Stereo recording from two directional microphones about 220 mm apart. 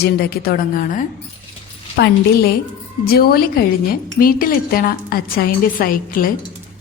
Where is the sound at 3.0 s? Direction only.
45° left (ahead or behind).